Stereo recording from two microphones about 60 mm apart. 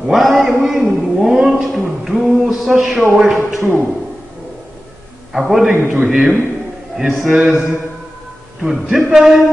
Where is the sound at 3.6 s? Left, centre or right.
Right.